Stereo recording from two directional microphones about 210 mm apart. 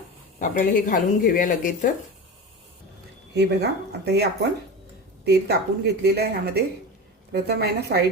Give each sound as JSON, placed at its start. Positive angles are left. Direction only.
{"t": 0.3, "sound": "speech", "side_deg": 40}
{"t": 3.3, "sound": "a woman's voice", "side_deg": -50}